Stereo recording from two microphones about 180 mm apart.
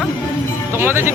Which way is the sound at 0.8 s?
10° right (ahead or behind).